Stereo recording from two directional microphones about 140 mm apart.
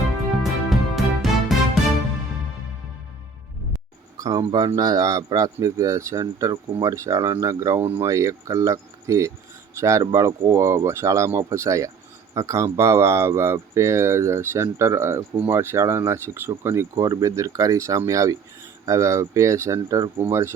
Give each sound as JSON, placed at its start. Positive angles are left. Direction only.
{"t": 0.7, "sound": "music", "side_deg": 0}
{"t": 4.2, "sound": "speech", "side_deg": -25}